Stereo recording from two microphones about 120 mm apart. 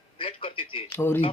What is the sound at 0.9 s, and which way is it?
Speech, 20° left (ahead or behind).